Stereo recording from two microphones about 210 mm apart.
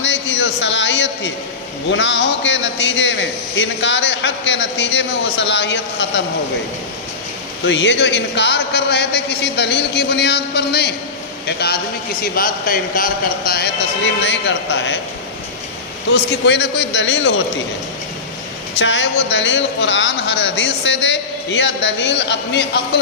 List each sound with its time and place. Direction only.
0.0 s a sound: 60° left (ahead or behind)
1.9 s a man's voice: 60° left (ahead or behind)
7.6 s a man's voice: 60° left (ahead or behind)
16.1 s a man's voice: 55° left (ahead or behind)
18.8 s a man's voice: 60° left (ahead or behind)